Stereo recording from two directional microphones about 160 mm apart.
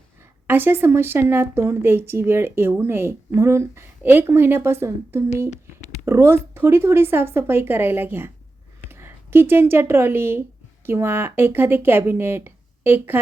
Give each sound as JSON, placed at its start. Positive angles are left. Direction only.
{"t": 0.4, "sound": "speech", "side_deg": -15}
{"t": 5.5, "sound": "a sound", "side_deg": 45}
{"t": 6.1, "sound": "speech", "side_deg": -15}